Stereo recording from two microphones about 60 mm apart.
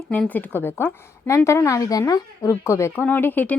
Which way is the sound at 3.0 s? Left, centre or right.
Left.